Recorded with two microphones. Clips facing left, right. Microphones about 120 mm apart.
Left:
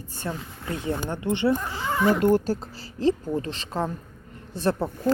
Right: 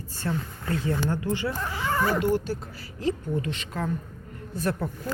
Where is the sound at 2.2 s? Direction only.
45° left (ahead or behind).